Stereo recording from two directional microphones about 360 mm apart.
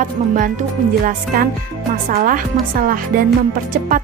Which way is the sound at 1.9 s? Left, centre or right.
Right.